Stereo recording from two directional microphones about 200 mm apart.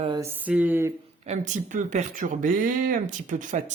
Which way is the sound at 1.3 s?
35° right (ahead or behind).